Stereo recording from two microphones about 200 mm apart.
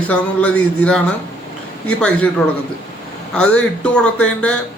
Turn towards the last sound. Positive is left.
turn(degrees=5)  # may be behind; listen again after turning